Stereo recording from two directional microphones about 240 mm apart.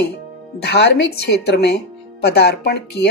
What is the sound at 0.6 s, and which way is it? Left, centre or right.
Speech, left.